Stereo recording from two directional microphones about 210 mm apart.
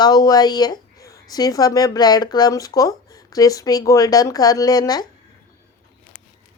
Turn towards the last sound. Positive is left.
turn(degrees=20)  # may be behind; listen again after turning